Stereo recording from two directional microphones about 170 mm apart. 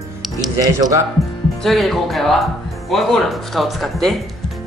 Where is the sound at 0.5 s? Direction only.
20° right (ahead or behind).